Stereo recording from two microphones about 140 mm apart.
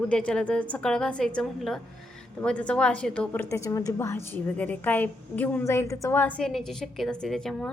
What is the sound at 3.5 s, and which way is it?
A woman's voice, 20° left (ahead or behind).